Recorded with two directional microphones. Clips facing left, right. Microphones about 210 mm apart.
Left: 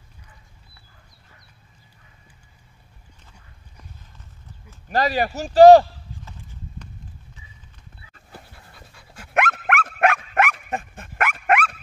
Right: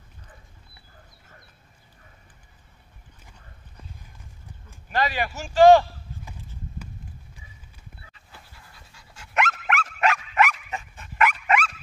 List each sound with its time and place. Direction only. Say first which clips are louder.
4.8 s a man's voice: left 4 dB; 40° left (ahead or behind)
8.1 s dog: left 6 dB; 50° left (ahead or behind)